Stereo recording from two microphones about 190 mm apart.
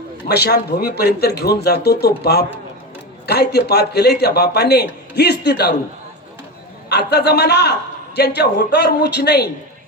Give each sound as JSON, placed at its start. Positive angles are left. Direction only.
{"t": 0.3, "sound": "a man's voice", "side_deg": 60}
{"t": 6.9, "sound": "a man's voice", "side_deg": 60}